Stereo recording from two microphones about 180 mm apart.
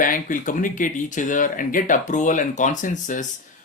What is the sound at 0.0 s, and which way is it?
Speech, 50° left (ahead or behind).